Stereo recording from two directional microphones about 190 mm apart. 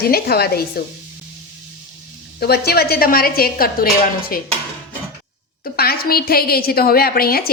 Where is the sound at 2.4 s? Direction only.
55° left (ahead or behind).